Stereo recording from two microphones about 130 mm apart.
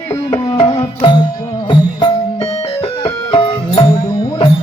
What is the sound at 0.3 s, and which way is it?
Tabla, 25° left (ahead or behind).